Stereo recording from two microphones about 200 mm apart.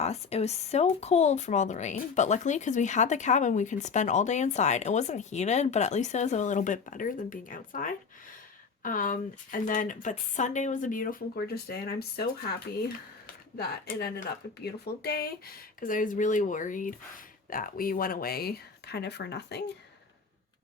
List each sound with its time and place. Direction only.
0.0 s a woman's voice: 30° left (ahead or behind); by 19.7 s 55° left (ahead or behind)